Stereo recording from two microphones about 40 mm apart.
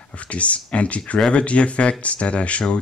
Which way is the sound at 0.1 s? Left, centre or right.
Left.